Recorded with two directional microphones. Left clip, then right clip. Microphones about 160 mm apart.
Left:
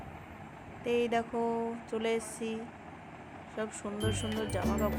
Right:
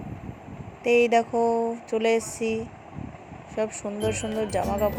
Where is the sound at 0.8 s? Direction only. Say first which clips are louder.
Right 11 dB; 30° right (ahead or behind).